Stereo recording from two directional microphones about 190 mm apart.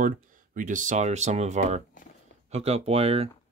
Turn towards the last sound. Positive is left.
turn(degrees=-30)  # may be behind; listen again after turning